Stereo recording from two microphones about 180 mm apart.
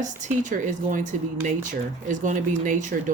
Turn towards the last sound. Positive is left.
turn(degrees=-45)  # may be behind; listen again after turning